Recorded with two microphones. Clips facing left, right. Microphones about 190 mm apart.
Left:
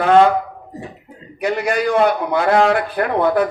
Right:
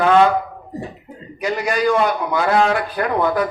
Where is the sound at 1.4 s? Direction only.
60° left (ahead or behind).